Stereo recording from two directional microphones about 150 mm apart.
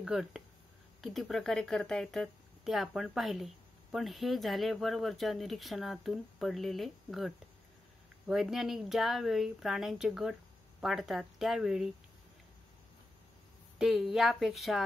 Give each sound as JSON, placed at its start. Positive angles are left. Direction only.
{"t": 0.0, "sound": "speech", "side_deg": -5}
{"t": 13.7, "sound": "speech", "side_deg": 0}